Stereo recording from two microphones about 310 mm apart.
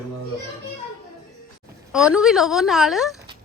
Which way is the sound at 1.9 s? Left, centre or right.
Centre.